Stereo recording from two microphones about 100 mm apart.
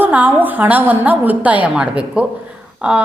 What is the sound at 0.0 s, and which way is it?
A woman's voice, 15° right (ahead or behind).